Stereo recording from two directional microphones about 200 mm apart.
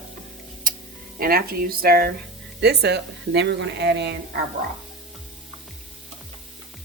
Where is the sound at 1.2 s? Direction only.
50° right (ahead or behind).